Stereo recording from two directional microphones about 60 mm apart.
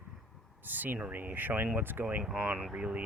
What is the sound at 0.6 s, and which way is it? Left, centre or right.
Speech, right.